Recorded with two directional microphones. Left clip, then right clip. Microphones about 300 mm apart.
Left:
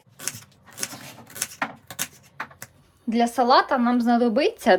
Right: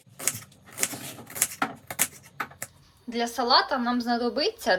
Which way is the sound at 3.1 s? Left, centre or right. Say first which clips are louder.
Left 4 dB; centre.